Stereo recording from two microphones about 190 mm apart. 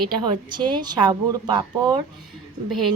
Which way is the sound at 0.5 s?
25° right (ahead or behind).